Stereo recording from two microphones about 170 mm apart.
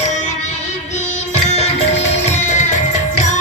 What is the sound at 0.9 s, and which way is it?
Music, 40° left (ahead or behind).